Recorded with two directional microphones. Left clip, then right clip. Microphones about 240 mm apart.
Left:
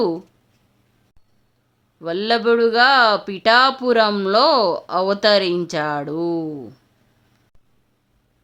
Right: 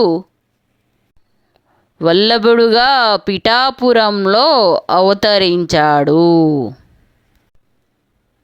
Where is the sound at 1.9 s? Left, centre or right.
Right.